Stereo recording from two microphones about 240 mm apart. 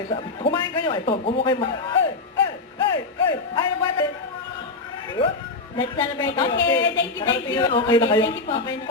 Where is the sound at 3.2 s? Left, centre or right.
Centre.